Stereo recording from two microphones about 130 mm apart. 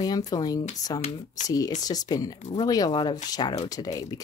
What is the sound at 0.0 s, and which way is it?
Speech, 30° left (ahead or behind).